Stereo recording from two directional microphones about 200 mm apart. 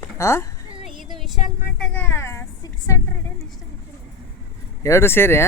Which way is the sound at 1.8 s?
10° left (ahead or behind).